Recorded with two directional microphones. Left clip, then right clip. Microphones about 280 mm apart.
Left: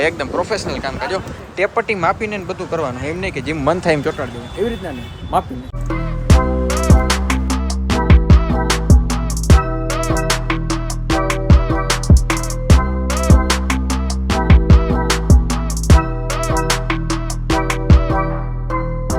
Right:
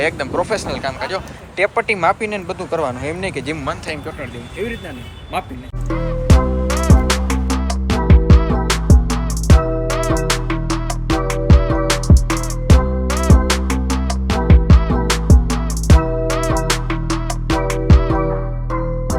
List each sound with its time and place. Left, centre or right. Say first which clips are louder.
0.0 s speech: left 1 dB; centre
5.3 s speech: left 6 dB; left
6.2 s music: left 3 dB; centre